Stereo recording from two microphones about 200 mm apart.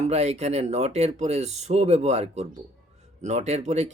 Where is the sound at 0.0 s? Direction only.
35° right (ahead or behind).